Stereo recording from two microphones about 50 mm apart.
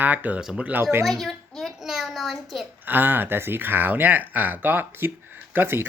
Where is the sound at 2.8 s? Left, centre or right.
Right.